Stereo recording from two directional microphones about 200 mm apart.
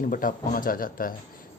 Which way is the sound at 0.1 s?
45° left (ahead or behind).